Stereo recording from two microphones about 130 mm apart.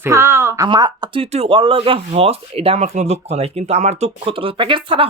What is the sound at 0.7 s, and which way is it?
Speech, 35° right (ahead or behind).